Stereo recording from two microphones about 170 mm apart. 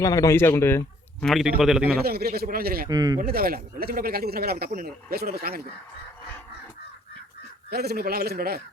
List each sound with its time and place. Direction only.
0.0 s speech: 20° left (ahead or behind)
1.2 s a man's voice: centre (ahead or behind)
2.0 s a man's voice: 65° right (ahead or behind)
2.9 s speech: 25° right (ahead or behind)
3.2 s a man's voice: 60° right (ahead or behind)
7.7 s a man's voice: 70° right (ahead or behind)